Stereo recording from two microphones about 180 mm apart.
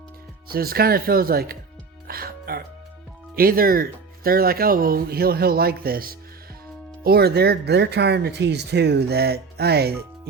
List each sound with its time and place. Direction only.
0.4 s speech: 55° right (ahead or behind)